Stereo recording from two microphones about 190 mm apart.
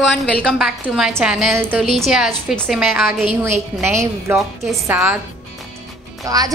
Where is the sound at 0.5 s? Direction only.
5° right (ahead or behind).